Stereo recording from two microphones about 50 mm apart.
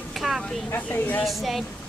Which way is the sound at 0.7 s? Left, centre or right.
Left.